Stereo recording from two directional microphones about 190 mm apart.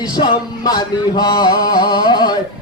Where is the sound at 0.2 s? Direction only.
20° left (ahead or behind).